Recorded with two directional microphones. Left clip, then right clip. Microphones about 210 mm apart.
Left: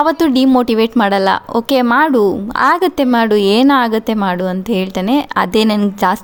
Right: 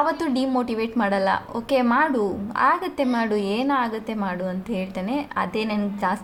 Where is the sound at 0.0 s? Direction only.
45° left (ahead or behind).